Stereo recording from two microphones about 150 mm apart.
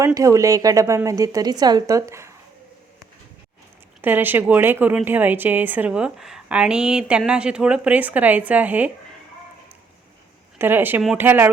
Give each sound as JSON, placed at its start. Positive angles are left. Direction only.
{"t": 0.0, "sound": "a woman's voice", "side_deg": -20}
{"t": 4.0, "sound": "speech", "side_deg": -10}
{"t": 10.6, "sound": "speech", "side_deg": -15}